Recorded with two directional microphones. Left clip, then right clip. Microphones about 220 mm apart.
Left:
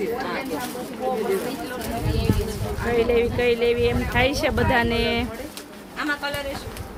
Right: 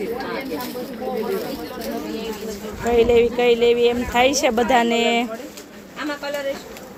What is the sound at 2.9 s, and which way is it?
Speech, 15° right (ahead or behind).